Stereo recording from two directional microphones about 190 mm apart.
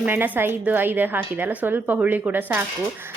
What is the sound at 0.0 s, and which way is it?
Speech, 10° right (ahead or behind).